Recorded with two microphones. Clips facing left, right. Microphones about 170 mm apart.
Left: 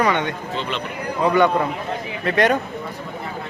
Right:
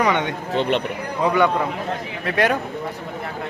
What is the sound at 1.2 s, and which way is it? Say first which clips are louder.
Speech: left 2 dB; 10° right (ahead or behind).